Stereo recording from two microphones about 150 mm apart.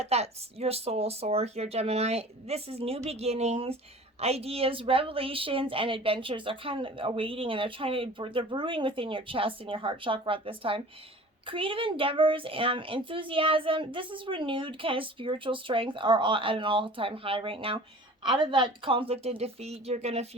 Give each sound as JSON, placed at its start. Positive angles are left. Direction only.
{"t": 0.0, "sound": "a woman's voice", "side_deg": -45}